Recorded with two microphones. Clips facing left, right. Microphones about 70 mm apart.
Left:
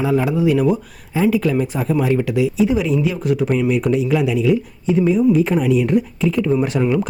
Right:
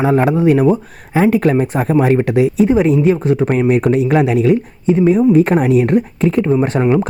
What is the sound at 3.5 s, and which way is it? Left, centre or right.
Speech, right.